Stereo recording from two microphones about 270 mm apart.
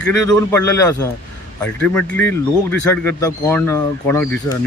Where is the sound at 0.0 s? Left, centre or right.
Centre.